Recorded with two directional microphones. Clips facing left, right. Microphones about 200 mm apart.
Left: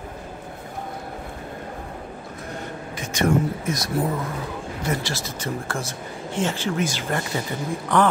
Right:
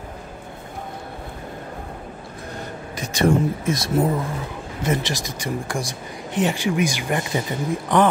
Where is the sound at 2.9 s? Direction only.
35° right (ahead or behind).